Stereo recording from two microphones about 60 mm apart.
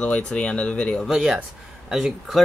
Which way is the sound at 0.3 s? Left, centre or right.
Centre.